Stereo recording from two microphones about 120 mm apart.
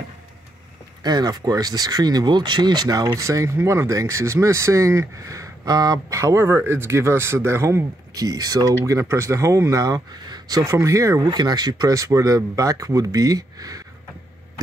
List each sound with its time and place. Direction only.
1.0 s speech: 35° right (ahead or behind)